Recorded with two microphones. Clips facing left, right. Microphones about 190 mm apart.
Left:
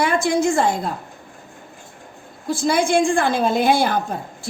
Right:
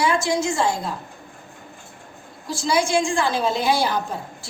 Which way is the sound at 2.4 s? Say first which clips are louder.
Left 3 dB; 55° left (ahead or behind).